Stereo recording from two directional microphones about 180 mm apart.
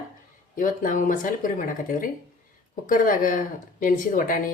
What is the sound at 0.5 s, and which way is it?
Speech, 50° left (ahead or behind).